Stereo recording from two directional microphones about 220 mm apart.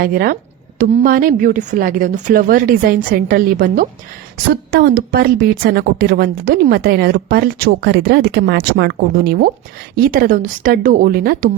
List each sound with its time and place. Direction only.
0.0 s a woman's voice: 40° right (ahead or behind)